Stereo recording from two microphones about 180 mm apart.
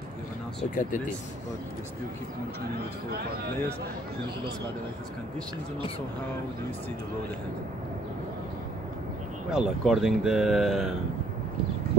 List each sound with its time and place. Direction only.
0.7 s speech: 45° left (ahead or behind)
9.5 s speech: centre (ahead or behind)